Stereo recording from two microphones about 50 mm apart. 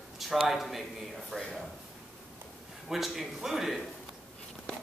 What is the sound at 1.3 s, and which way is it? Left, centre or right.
Speech, centre.